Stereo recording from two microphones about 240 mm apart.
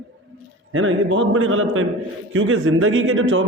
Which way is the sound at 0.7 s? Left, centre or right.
Right.